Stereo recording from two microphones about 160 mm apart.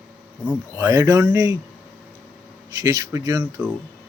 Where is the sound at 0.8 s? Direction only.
20° right (ahead or behind).